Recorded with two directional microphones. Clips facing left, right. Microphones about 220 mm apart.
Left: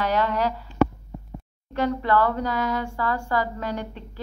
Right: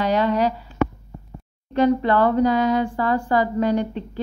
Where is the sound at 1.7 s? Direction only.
20° right (ahead or behind).